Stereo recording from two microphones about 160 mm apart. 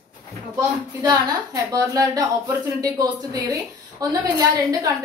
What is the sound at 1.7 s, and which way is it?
Speech, 20° right (ahead or behind).